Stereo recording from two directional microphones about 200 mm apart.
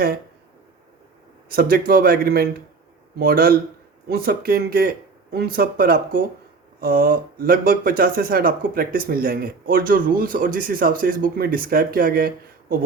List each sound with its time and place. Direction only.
1.5 s speech: 50° right (ahead or behind)